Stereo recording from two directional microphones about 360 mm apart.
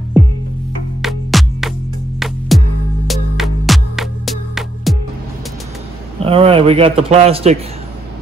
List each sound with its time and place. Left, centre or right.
1.0 s music: centre
6.2 s speech: centre